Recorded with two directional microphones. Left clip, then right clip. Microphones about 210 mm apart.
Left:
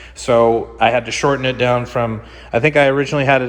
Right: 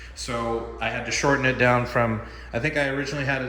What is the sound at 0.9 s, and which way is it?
Speech, 15° left (ahead or behind).